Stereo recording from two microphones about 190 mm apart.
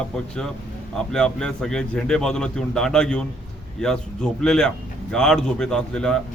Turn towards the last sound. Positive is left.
turn(degrees=5)  # may be behind; listen again after turning